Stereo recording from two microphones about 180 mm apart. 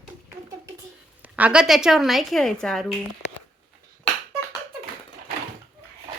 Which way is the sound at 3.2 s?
40° left (ahead or behind).